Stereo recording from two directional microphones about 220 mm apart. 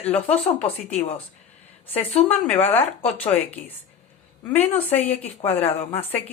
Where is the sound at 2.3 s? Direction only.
10° left (ahead or behind).